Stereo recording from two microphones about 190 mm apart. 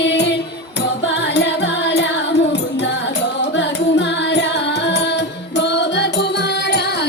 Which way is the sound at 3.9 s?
65° left (ahead or behind).